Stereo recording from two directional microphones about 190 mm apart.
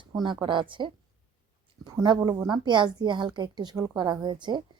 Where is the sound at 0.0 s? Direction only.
25° right (ahead or behind).